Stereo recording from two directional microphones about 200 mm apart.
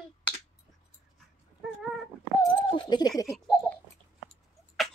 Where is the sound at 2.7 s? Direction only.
20° left (ahead or behind).